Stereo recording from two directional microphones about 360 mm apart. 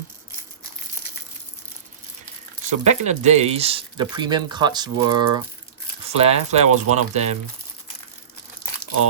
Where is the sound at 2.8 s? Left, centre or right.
Centre.